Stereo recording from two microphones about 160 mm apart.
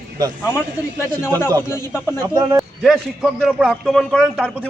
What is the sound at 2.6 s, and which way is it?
Speech, centre (ahead or behind).